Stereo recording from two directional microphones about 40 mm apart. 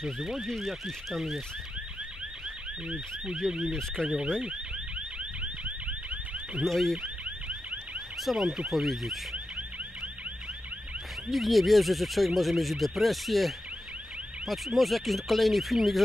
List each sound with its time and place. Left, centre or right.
0.0 s car alarm: centre
0.6 s car alarm: centre
3.7 s speech: centre
4.4 s car alarm: right
6.6 s speech: centre
7.0 s car alarm: right
8.2 s car alarm: centre
8.5 s speech: centre
11.2 s speech: centre
14.8 s speech: centre